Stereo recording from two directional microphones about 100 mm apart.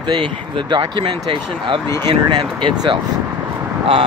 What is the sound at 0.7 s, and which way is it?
Speech, 55° right (ahead or behind).